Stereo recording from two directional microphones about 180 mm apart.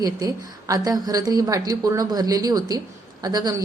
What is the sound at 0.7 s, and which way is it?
A woman's voice, 20° right (ahead or behind).